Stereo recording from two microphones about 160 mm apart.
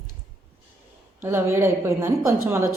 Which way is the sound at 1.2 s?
15° right (ahead or behind).